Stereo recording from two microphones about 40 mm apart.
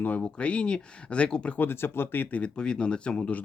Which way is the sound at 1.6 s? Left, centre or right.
Left.